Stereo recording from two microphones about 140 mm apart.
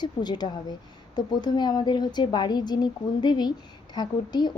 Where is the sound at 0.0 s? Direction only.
30° left (ahead or behind).